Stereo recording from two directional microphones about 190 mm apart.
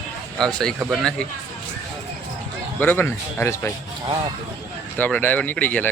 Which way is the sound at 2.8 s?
10° left (ahead or behind).